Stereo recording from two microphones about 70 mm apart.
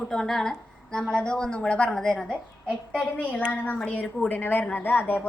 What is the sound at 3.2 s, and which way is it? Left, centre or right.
A woman's voice, left.